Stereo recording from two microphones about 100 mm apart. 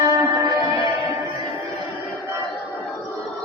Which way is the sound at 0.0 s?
35° right (ahead or behind).